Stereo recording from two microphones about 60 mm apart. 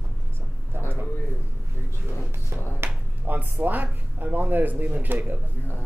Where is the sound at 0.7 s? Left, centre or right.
Right.